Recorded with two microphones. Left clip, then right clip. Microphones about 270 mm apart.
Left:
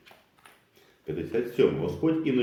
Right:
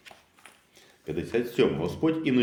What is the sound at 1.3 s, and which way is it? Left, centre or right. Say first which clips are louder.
Speech: left 1 dB; right.